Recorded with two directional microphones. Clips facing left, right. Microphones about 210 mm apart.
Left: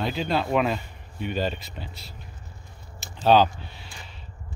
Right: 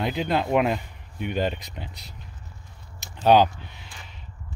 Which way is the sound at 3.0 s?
15° right (ahead or behind).